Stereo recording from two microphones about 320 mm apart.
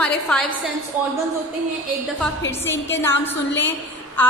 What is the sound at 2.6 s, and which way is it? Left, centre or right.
A woman's voice, centre.